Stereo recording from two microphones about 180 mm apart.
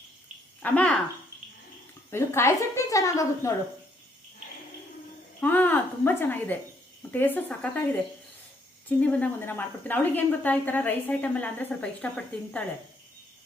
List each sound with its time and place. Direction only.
0.6 s a woman's voice: 5° left (ahead or behind)
2.0 s a woman's voice: 15° left (ahead or behind)
5.4 s a woman's voice: 10° left (ahead or behind)
8.9 s a woman's voice: 5° left (ahead or behind)